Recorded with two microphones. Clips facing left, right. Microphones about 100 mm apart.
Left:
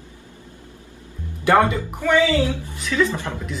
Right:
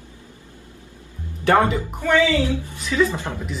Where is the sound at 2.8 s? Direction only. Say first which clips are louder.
Even; 5° right (ahead or behind).